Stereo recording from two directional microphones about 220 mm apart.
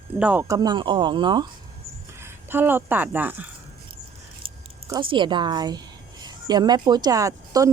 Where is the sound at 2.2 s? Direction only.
10° right (ahead or behind).